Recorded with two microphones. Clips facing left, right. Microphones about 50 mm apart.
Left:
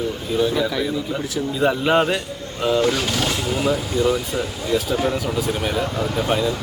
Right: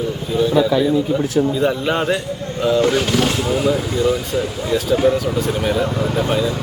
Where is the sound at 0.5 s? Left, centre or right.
Right.